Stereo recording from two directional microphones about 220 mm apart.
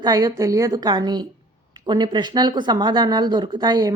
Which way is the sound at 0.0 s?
15° right (ahead or behind).